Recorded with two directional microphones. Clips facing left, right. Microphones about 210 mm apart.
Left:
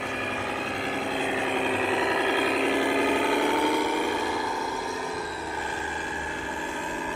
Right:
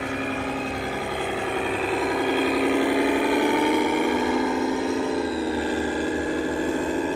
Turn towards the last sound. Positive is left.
turn(degrees=-25)  # may be behind; listen again after turning